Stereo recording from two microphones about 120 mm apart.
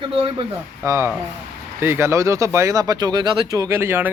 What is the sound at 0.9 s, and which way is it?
A man's voice, 25° right (ahead or behind).